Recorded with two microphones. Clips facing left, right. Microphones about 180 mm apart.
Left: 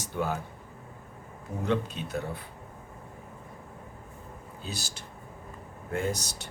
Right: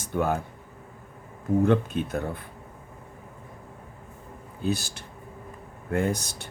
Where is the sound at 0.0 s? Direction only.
55° right (ahead or behind).